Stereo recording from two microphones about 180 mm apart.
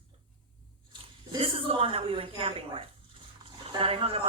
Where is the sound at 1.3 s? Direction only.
30° right (ahead or behind).